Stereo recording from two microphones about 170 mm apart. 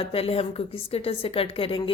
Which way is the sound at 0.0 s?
35° left (ahead or behind).